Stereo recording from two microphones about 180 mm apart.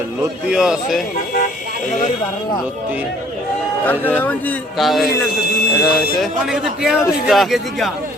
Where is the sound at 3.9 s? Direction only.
10° left (ahead or behind).